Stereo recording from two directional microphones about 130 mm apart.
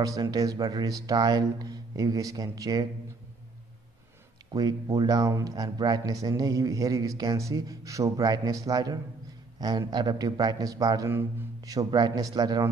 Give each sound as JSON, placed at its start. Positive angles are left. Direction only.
{"t": 0.0, "sound": "speech", "side_deg": -30}
{"t": 4.5, "sound": "a man's voice", "side_deg": -30}